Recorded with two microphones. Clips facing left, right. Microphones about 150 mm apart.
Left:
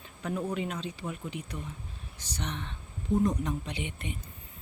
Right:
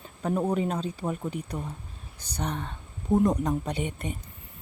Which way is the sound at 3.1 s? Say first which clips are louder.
Right 4 dB; 65° right (ahead or behind).